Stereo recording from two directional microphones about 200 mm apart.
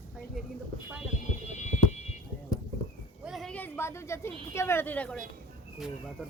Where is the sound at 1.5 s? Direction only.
35° left (ahead or behind).